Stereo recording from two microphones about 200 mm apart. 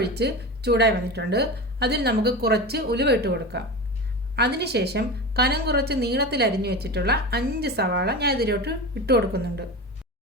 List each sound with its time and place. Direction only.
0.0 s a woman's voice: 55° right (ahead or behind)